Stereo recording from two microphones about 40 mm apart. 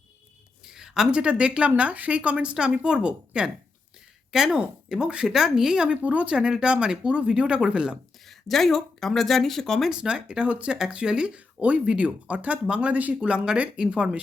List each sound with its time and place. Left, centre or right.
0.6 s a sound: centre
1.1 s a woman's voice: right
4.3 s speech: centre
4.9 s a woman's voice: right
5.9 s speech: right
6.3 s a woman's voice: right
8.2 s speech: centre
9.9 s a woman's voice: right
13.3 s a woman's voice: right